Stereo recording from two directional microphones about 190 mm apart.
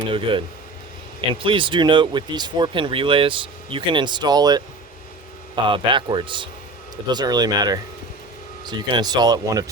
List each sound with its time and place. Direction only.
0.1 s speech: 25° right (ahead or behind)
5.6 s speech: 25° right (ahead or behind)